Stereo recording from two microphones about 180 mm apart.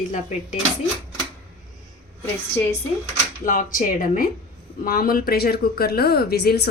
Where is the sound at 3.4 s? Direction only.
50° left (ahead or behind).